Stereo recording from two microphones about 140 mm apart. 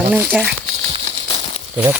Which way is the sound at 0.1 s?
10° right (ahead or behind).